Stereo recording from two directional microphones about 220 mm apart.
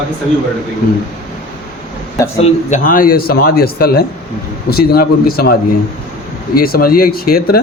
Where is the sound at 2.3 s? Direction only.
35° left (ahead or behind).